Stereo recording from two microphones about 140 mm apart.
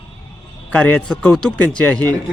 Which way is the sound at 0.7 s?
10° left (ahead or behind).